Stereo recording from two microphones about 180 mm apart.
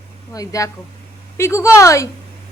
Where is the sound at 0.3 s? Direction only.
20° left (ahead or behind).